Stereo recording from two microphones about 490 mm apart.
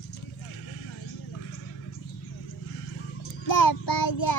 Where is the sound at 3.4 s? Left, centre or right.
Left.